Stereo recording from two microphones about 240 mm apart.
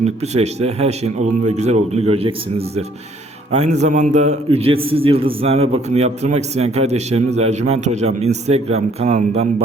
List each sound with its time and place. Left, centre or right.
0.0 s a man's voice: right